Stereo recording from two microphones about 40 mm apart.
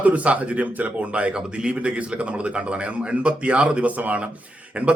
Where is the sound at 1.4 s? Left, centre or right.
Right.